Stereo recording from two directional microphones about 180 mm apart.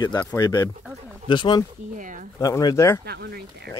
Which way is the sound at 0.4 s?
20° left (ahead or behind).